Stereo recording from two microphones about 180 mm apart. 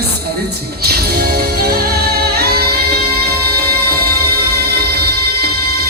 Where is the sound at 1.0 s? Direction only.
60° right (ahead or behind).